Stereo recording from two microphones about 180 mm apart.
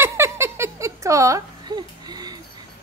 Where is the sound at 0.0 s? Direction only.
15° right (ahead or behind).